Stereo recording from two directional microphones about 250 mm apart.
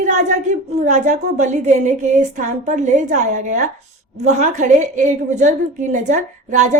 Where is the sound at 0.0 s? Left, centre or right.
Right.